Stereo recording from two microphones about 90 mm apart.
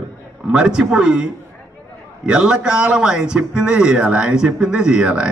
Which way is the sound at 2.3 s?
10° right (ahead or behind).